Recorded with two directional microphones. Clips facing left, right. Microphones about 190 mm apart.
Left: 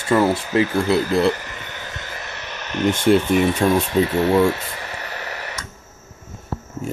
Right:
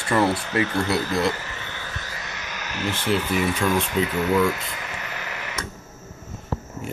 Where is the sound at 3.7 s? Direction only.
30° left (ahead or behind).